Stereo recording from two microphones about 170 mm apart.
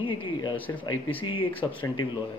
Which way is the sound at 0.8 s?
30° left (ahead or behind).